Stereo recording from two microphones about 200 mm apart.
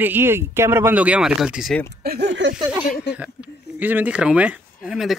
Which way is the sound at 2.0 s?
55° right (ahead or behind).